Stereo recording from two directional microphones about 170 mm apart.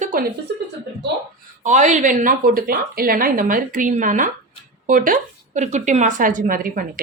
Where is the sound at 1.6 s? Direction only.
45° right (ahead or behind).